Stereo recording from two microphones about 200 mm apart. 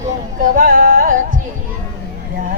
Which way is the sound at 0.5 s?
45° right (ahead or behind).